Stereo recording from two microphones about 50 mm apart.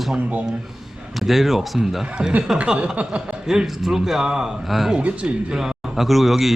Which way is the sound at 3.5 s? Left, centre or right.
Centre.